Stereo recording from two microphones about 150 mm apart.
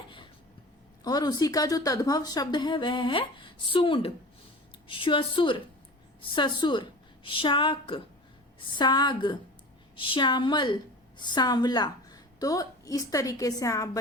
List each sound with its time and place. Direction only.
1.0 s a woman's voice: 25° left (ahead or behind)